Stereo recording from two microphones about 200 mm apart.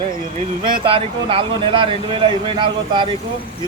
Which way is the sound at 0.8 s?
25° right (ahead or behind).